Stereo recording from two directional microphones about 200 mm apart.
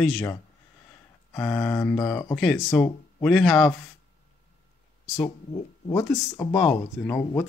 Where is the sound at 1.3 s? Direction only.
5° left (ahead or behind).